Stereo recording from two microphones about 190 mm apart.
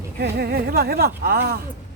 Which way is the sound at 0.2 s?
60° right (ahead or behind).